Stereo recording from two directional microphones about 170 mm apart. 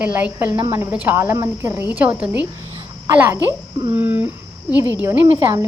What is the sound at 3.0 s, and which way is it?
Speech, 15° right (ahead or behind).